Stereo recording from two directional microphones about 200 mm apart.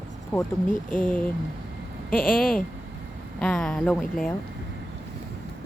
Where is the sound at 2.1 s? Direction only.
45° left (ahead or behind).